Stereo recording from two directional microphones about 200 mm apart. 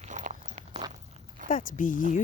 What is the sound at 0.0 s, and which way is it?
Walk, 35° right (ahead or behind).